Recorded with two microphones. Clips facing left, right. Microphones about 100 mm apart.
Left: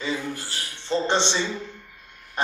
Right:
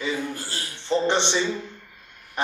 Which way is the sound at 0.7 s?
15° right (ahead or behind).